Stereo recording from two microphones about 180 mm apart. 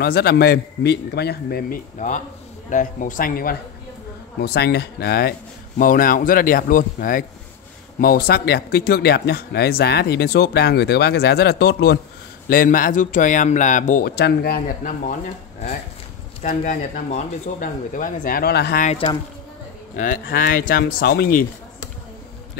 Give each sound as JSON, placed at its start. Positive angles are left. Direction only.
{"t": 0.0, "sound": "speech", "side_deg": 60}
{"t": 4.4, "sound": "speech", "side_deg": 65}
{"t": 5.8, "sound": "speech", "side_deg": 50}
{"t": 12.4, "sound": "speech", "side_deg": 50}
{"t": 14.1, "sound": "speech", "side_deg": 65}
{"t": 16.4, "sound": "speech", "side_deg": 50}
{"t": 18.9, "sound": "speech", "side_deg": 30}
{"t": 20.0, "sound": "speech", "side_deg": 50}